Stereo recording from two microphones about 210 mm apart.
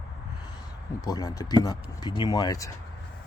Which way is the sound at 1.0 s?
15° left (ahead or behind).